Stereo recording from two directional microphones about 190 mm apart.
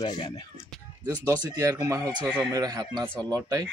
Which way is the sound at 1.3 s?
15° right (ahead or behind).